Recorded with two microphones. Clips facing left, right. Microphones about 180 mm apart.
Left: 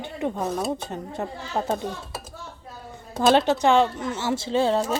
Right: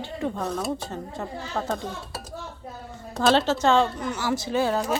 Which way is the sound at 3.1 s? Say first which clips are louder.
Left 2 dB; 15° left (ahead or behind).